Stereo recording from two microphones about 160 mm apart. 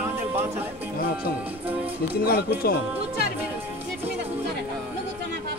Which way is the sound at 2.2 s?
70° left (ahead or behind).